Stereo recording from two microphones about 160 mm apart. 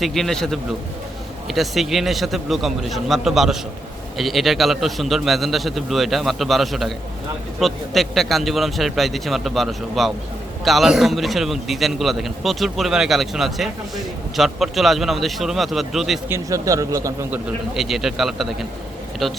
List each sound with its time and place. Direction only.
0.0 s a man's voice: centre (ahead or behind)
16.3 s speech: 20° right (ahead or behind)
17.7 s a man's voice: centre (ahead or behind)